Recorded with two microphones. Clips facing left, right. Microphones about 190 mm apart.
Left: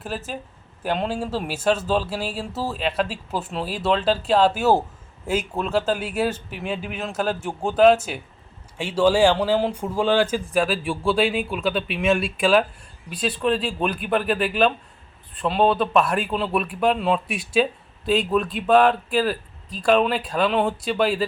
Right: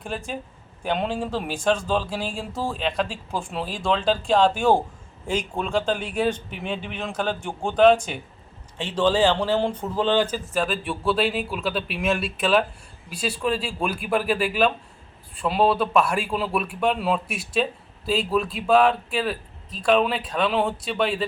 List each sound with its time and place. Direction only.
0.0 s a man's voice: 5° left (ahead or behind)
10.8 s a man's voice: centre (ahead or behind)